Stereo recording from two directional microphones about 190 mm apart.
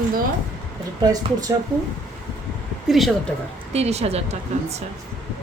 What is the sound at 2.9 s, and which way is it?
Speech, centre (ahead or behind).